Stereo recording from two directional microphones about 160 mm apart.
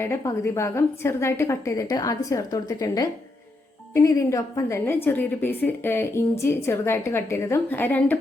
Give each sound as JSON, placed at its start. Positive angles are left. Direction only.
{"t": 0.0, "sound": "a woman's voice", "side_deg": 20}